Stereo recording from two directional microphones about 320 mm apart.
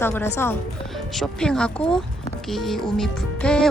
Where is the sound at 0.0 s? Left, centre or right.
Centre.